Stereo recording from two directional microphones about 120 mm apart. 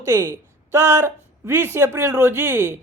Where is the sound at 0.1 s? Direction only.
25° right (ahead or behind).